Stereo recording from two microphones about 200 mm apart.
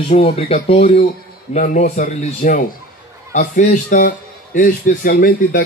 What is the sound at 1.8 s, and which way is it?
Speech, 40° left (ahead or behind).